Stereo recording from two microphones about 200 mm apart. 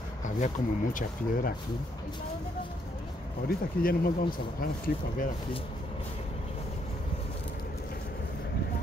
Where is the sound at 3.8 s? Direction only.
45° left (ahead or behind).